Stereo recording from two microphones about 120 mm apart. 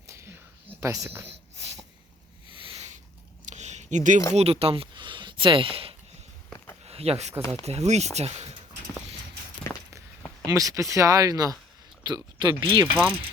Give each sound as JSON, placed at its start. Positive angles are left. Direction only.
{"t": 0.1, "sound": "whispering", "side_deg": -20}
{"t": 0.8, "sound": "speech", "side_deg": -25}
{"t": 2.6, "sound": "a sound", "side_deg": -50}
{"t": 3.4, "sound": "a sound", "side_deg": -80}
{"t": 4.4, "sound": "speech", "side_deg": -55}
{"t": 9.7, "sound": "walk", "side_deg": 20}
{"t": 10.4, "sound": "speech", "side_deg": -30}